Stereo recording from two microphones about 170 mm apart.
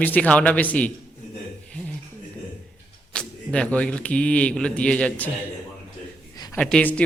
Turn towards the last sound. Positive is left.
turn(degrees=5)  # may be behind; listen again after turning